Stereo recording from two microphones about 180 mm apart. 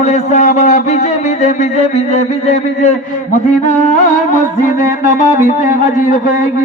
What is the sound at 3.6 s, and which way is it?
Music, 45° left (ahead or behind).